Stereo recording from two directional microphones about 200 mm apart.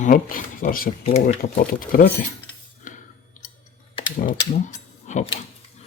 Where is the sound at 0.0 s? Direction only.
45° left (ahead or behind).